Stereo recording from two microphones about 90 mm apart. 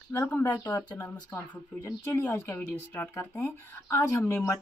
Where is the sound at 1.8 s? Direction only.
30° left (ahead or behind).